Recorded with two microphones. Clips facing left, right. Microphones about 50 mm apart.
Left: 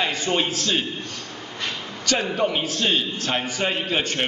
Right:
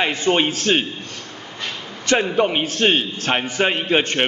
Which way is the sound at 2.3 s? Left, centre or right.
Right.